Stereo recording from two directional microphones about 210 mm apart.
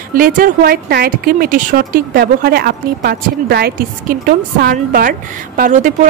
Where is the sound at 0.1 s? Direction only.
45° right (ahead or behind).